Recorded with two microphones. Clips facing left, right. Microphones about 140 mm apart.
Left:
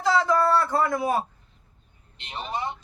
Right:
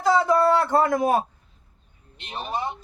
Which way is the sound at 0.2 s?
20° right (ahead or behind).